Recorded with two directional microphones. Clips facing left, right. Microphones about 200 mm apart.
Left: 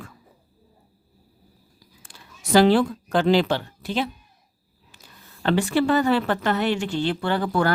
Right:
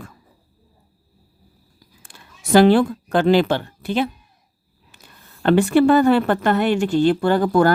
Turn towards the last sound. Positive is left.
turn(degrees=-45)  # may be behind; listen again after turning